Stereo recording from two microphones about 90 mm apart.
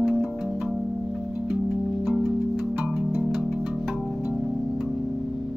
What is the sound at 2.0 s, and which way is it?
Music, centre (ahead or behind).